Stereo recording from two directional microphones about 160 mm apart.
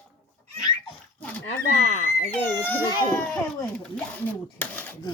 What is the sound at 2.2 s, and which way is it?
Speech, 15° left (ahead or behind).